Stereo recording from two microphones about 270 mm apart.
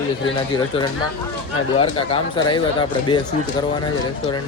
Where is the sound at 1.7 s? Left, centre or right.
Centre.